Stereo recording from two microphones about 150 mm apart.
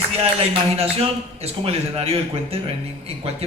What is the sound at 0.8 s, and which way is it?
A man's voice, 40° right (ahead or behind).